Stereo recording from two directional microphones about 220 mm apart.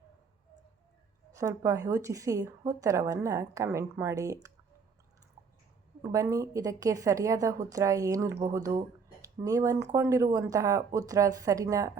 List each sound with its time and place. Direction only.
1.3 s speech: 15° right (ahead or behind)
6.0 s a woman's voice: 15° right (ahead or behind)